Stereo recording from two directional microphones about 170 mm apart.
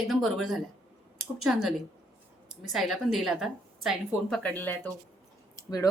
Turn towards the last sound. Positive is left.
turn(degrees=20)  # may be behind; listen again after turning